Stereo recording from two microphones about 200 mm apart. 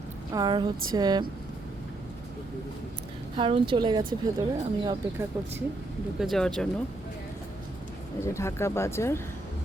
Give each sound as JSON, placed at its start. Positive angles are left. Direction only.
{"t": 0.3, "sound": "speech", "side_deg": -20}
{"t": 3.3, "sound": "speech", "side_deg": -25}
{"t": 6.1, "sound": "speech", "side_deg": 0}
{"t": 8.2, "sound": "speech", "side_deg": 15}